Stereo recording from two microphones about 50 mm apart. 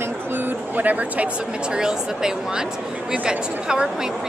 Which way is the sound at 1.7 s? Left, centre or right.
Centre.